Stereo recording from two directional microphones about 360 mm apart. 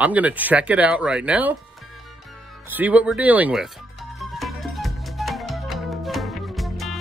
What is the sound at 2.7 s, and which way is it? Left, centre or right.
Speech, centre.